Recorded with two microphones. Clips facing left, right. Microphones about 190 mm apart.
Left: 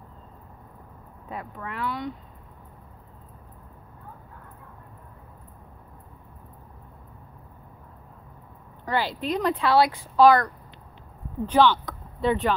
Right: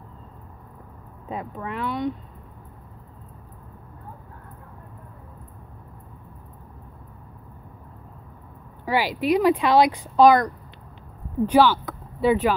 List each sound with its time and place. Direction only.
1.3 s speech: 20° right (ahead or behind)
8.8 s speech: 10° right (ahead or behind)